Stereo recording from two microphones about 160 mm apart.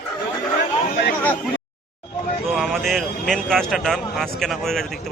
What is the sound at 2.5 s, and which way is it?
Speech, centre (ahead or behind).